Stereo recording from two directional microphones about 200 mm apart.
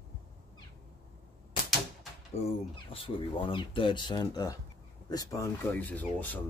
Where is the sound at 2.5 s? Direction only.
25° left (ahead or behind); by 6.4 s 10° left (ahead or behind).